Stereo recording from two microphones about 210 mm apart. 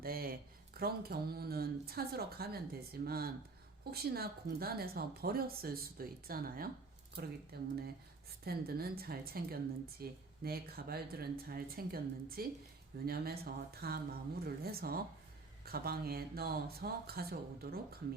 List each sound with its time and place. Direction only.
0.0 s speech: 45° right (ahead or behind)